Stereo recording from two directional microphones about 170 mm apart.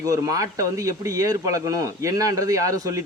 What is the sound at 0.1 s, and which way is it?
Speech, 20° right (ahead or behind).